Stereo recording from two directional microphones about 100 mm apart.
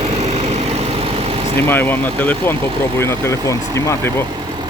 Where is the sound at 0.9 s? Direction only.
70° right (ahead or behind).